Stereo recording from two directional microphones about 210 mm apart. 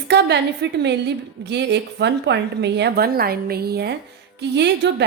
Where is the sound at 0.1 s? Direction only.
55° right (ahead or behind).